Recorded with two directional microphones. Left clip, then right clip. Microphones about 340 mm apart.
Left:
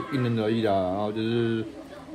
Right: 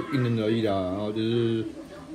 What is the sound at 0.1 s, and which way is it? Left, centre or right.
Speech, centre.